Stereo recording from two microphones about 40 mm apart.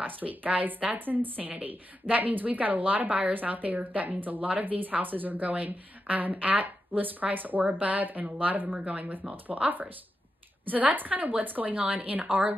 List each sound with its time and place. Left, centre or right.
0.0 s a woman's voice: right
0.9 s a woman's voice: right